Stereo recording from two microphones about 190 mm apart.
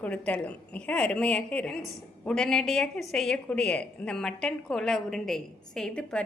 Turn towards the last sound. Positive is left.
turn(degrees=5)  # may be behind; listen again after turning